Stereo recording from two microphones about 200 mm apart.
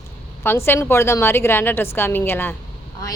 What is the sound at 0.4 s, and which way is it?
A woman's voice, 10° left (ahead or behind).